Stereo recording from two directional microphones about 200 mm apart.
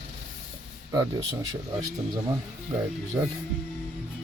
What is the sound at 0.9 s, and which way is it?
Speech, 20° right (ahead or behind).